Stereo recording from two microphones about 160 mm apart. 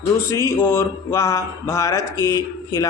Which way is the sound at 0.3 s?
20° left (ahead or behind).